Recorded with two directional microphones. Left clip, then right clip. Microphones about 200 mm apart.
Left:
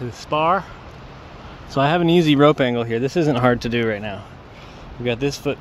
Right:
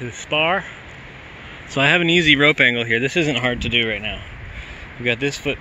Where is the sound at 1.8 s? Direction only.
5° left (ahead or behind).